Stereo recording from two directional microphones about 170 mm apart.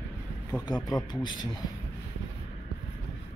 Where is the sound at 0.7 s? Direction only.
25° left (ahead or behind).